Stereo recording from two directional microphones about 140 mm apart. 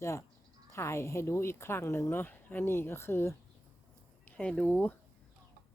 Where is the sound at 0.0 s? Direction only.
20° left (ahead or behind).